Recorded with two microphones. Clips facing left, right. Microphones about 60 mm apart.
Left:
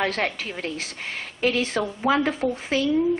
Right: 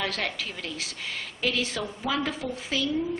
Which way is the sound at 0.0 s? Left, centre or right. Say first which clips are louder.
Left 5 dB; left.